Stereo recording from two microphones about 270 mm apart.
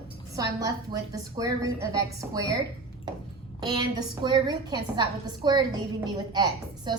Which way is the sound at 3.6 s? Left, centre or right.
Centre.